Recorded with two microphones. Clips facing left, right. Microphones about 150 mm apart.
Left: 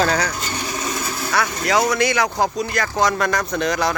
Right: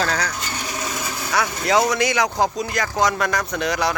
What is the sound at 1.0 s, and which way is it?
Speech, 15° right (ahead or behind).